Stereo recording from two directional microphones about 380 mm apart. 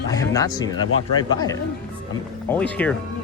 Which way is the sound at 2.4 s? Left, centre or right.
Centre.